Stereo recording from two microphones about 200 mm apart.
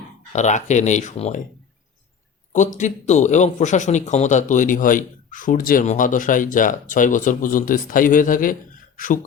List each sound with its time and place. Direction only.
0.3 s speech: 35° left (ahead or behind)
2.5 s speech: 40° left (ahead or behind)